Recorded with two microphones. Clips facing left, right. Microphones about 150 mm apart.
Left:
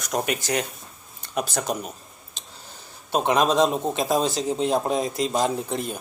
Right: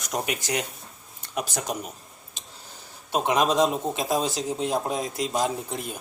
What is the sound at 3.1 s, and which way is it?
Speech, 10° right (ahead or behind).